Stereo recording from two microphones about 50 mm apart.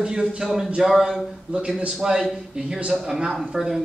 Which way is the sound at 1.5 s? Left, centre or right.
Right.